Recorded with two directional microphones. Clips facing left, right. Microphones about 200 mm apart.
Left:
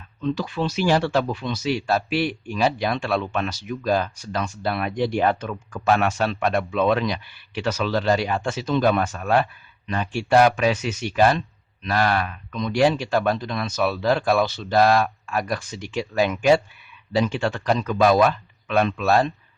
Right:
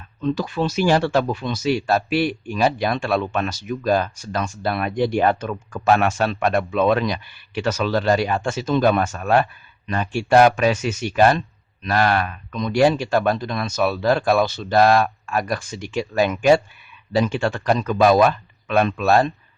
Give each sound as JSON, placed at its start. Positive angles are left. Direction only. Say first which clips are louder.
{"t": 0.2, "sound": "speech", "louder": "right 3 dB", "side_deg": -45}